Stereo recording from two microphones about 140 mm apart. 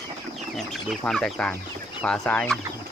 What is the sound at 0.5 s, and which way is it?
Speech, centre (ahead or behind).